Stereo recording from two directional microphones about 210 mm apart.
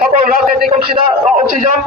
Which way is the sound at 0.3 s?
45° right (ahead or behind).